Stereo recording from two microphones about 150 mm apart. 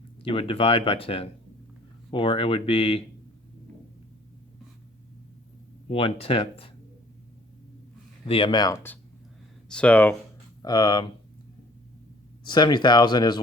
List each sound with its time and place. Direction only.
0.2 s speech: 35° left (ahead or behind)
5.9 s speech: 40° left (ahead or behind)
8.3 s speech: 35° left (ahead or behind)
8.7 s speech: 15° left (ahead or behind)
10.6 s speech: 30° left (ahead or behind)
12.5 s speech: 30° left (ahead or behind)